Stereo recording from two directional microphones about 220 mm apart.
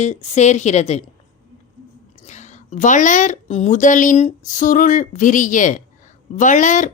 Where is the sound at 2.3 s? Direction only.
35° left (ahead or behind).